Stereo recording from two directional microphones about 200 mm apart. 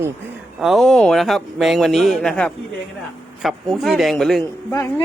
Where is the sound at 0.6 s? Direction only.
Centre (ahead or behind).